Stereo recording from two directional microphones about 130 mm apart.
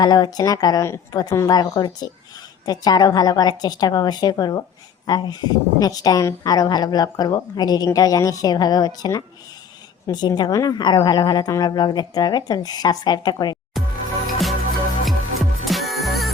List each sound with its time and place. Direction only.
0.0 s a woman's voice: 30° left (ahead or behind)
14.3 s music: centre (ahead or behind)